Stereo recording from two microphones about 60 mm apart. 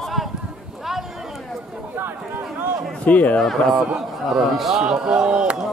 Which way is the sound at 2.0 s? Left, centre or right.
Right.